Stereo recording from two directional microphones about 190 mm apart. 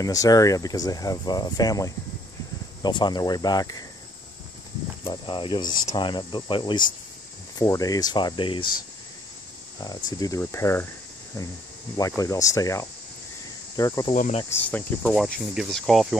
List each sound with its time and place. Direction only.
0.0 s speech: 20° left (ahead or behind)
5.0 s speech: 25° left (ahead or behind)
10.1 s speech: 20° left (ahead or behind)
12.0 s speech: 15° left (ahead or behind)
14.1 s speech: 40° left (ahead or behind)
14.5 s speech: 10° left (ahead or behind)